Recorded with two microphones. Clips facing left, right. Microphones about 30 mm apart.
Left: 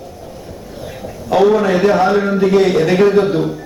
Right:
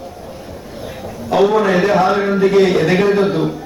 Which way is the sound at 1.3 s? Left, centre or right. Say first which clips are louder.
Left 1 dB; centre.